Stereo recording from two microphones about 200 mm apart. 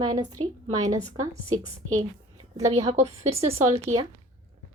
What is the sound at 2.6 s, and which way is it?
Speech, 15° right (ahead or behind).